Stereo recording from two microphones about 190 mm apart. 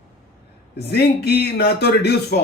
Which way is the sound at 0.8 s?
55° left (ahead or behind).